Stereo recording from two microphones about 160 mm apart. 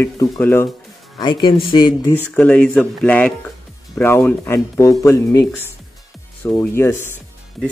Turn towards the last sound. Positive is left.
turn(degrees=15)  # may be behind; listen again after turning